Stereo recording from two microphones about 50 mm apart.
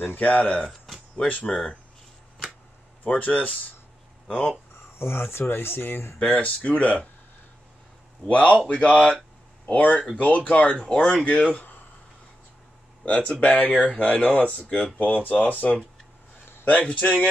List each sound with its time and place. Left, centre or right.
0.2 s speech: left
0.7 s a sound: centre
1.1 s speech: left
3.0 s speech: left
4.9 s speech: left
6.3 s speech: left
8.6 s speech: left
13.0 s speech: left